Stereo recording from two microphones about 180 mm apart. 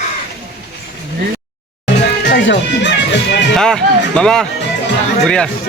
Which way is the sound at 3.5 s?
5° left (ahead or behind).